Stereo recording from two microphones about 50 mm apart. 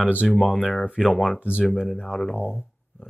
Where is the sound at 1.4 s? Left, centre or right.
Right.